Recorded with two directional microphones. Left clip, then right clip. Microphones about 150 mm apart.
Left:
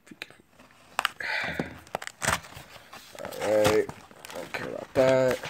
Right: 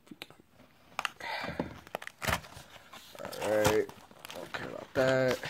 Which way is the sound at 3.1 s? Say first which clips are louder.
Left 5 dB; 5° left (ahead or behind).